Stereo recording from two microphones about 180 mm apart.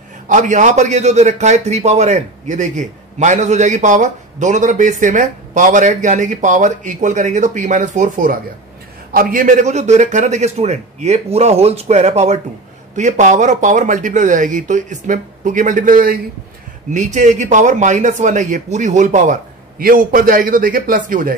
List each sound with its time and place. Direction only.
0.3 s a man's voice: 45° right (ahead or behind)